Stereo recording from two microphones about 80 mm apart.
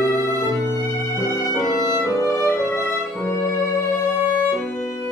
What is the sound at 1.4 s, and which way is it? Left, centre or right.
Music, left.